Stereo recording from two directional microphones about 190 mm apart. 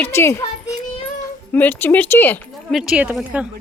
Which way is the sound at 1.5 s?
10° left (ahead or behind).